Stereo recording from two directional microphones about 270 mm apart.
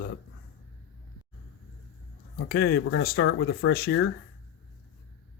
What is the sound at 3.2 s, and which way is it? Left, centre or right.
Speech, left.